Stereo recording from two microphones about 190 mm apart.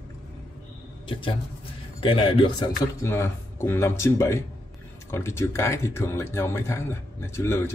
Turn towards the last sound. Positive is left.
turn(degrees=15)  # may be behind; listen again after turning